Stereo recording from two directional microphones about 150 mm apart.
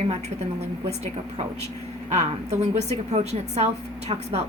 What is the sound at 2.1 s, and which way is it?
A woman's voice, 45° right (ahead or behind).